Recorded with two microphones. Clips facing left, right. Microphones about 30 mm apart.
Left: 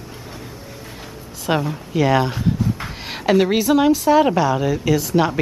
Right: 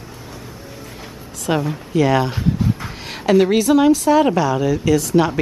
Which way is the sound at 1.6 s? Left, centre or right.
Centre.